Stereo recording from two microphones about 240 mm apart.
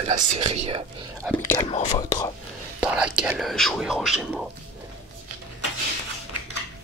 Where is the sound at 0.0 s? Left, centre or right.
Right.